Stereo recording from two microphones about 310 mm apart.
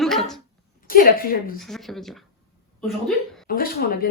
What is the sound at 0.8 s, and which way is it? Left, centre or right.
Speech, left.